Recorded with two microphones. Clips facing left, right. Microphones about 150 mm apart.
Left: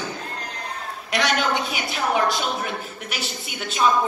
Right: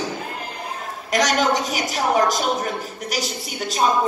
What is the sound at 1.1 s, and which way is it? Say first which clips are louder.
A woman's voice: right 3 dB; 40° right (ahead or behind).